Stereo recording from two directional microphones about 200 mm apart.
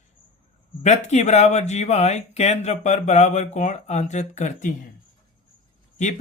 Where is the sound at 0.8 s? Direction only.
35° left (ahead or behind).